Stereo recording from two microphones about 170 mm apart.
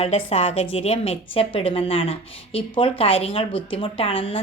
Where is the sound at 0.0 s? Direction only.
40° left (ahead or behind).